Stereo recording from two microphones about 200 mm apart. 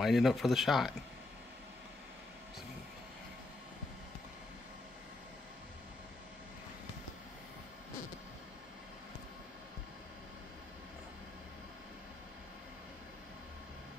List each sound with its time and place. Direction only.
0.0 s speech: centre (ahead or behind)